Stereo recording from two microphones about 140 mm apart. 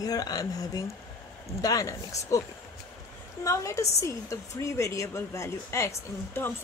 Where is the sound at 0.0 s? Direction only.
25° left (ahead or behind).